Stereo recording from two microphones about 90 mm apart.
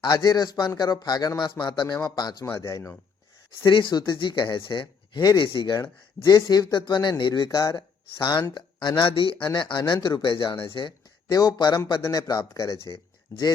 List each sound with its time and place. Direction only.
0.0 s a man's voice: 50° left (ahead or behind)
1.4 s a man's voice: 60° left (ahead or behind)
2.6 s speech: 40° left (ahead or behind)
3.7 s speech: 60° left (ahead or behind)
5.4 s speech: 70° left (ahead or behind)
6.2 s a man's voice: 45° left (ahead or behind)
6.7 s speech: 60° left (ahead or behind)
9.0 s speech: 80° left
9.5 s speech: 55° left (ahead or behind)
11.3 s a man's voice: 45° left (ahead or behind)
12.5 s speech: 35° left (ahead or behind)